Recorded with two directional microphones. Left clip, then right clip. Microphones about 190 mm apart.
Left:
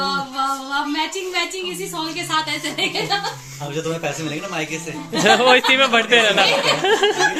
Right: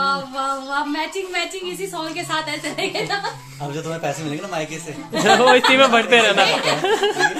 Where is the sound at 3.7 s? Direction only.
55° right (ahead or behind).